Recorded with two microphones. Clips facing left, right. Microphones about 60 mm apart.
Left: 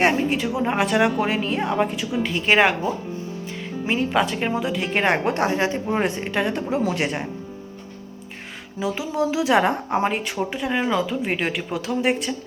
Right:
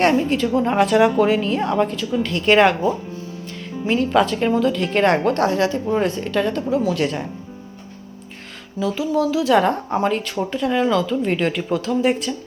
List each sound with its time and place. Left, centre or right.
0.2 s speech: centre
8.8 s speech: centre